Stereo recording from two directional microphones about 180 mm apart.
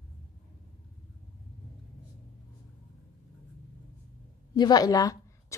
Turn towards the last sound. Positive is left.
turn(degrees=20)  # may be behind; listen again after turning